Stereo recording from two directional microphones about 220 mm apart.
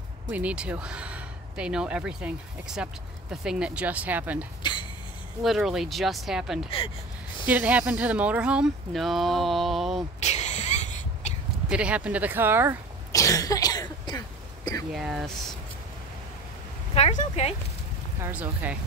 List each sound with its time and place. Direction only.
0.3 s speech: 5° right (ahead or behind)
10.2 s a sound: 30° left (ahead or behind)
11.7 s speech: 5° right (ahead or behind)
13.1 s throat clearing: 15° left (ahead or behind)
14.9 s speech: centre (ahead or behind)
16.9 s speech: 30° left (ahead or behind)
18.2 s speech: 5° right (ahead or behind)